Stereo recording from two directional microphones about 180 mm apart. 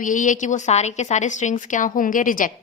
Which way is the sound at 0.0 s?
45° left (ahead or behind).